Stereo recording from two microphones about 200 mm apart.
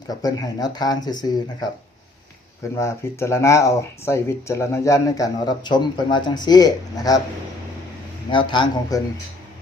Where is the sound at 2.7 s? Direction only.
15° left (ahead or behind).